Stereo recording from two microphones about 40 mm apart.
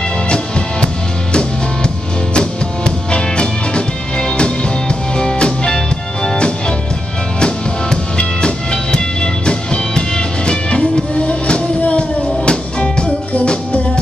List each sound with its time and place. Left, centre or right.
0.3 s music: left
2.3 s music: left